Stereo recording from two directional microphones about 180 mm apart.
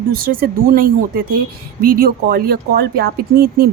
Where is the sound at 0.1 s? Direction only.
55° right (ahead or behind).